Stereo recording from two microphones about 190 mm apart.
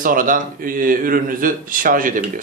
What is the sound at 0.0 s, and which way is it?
A man's voice, 45° right (ahead or behind).